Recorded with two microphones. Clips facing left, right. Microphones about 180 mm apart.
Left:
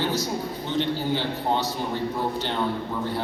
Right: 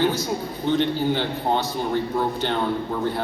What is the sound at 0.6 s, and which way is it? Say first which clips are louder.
A man's voice: right 5 dB; 55° right (ahead or behind).